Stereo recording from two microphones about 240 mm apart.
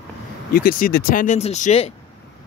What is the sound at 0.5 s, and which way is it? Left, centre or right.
Speech, left.